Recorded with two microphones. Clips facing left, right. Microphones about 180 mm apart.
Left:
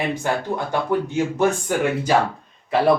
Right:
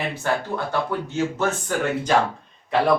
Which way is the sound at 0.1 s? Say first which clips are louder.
Left 2 dB; 15° left (ahead or behind).